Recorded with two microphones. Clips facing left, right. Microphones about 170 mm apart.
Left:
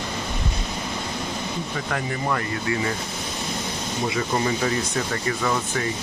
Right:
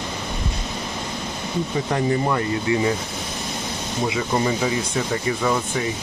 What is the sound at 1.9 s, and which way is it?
Speech, 20° right (ahead or behind).